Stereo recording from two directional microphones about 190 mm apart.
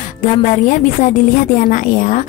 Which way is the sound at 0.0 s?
40° left (ahead or behind).